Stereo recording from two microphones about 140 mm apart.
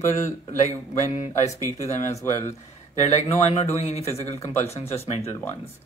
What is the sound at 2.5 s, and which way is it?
A man's voice, 55° left (ahead or behind).